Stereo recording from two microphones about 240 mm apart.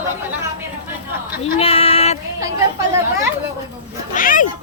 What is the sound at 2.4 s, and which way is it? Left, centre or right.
Speech, centre.